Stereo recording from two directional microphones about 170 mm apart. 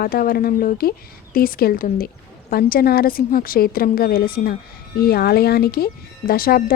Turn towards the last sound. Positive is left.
turn(degrees=60)  # may be behind; listen again after turning